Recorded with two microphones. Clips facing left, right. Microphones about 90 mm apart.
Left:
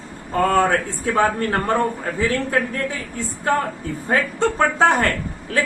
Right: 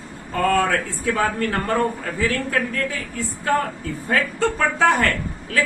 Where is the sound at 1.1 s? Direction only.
30° left (ahead or behind).